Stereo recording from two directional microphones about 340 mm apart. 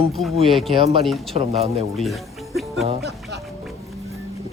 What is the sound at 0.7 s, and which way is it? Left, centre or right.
Speech, centre.